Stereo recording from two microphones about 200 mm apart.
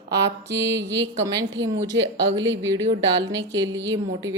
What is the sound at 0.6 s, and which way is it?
Mantra, 60° right (ahead or behind).